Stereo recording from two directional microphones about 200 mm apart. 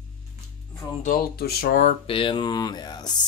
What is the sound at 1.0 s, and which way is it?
Speech, 50° left (ahead or behind).